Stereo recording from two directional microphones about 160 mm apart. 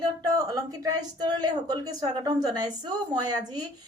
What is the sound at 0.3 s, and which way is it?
Speech, 25° right (ahead or behind).